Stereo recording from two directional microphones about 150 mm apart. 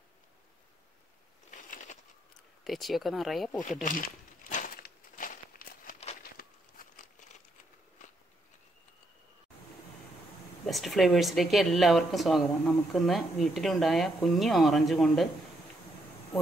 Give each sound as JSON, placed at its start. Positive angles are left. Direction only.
{"t": 1.5, "sound": "a sound", "side_deg": 60}
{"t": 2.6, "sound": "speech", "side_deg": 0}
{"t": 3.8, "sound": "walk", "side_deg": 65}
{"t": 6.3, "sound": "crumpling", "side_deg": 65}
{"t": 10.7, "sound": "speech", "side_deg": 0}